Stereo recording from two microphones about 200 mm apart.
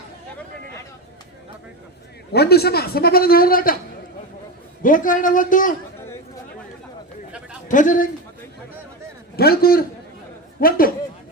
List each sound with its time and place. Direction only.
2.3 s speech: 55° left (ahead or behind)
4.8 s a man's voice: 40° left (ahead or behind)
7.7 s a man's voice: 40° left (ahead or behind)
9.3 s a man's voice: 50° left (ahead or behind)